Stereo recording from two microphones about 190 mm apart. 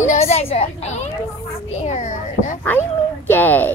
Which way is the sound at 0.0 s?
35° left (ahead or behind).